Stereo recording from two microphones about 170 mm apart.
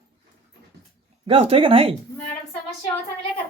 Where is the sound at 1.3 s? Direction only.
35° right (ahead or behind).